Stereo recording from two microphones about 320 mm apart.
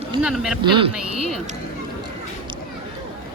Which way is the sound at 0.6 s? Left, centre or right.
Centre.